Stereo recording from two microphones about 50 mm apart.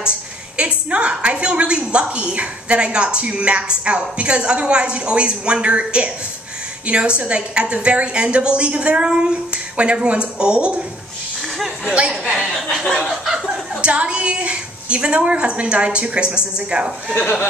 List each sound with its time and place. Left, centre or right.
0.6 s a woman's voice: right
11.5 s chuckle: centre
12.1 s speech: centre
12.8 s chuckle: centre
13.3 s a woman's voice: centre